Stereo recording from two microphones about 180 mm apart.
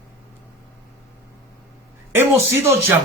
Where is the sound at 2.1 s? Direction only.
15° right (ahead or behind).